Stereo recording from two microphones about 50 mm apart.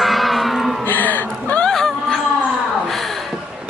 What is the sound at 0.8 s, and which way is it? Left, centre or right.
Chuckle, left.